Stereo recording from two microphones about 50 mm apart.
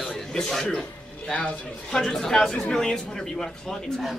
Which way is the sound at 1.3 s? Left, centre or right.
Centre.